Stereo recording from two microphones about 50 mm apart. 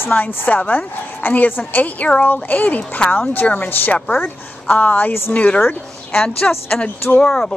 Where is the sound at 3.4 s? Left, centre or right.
Left.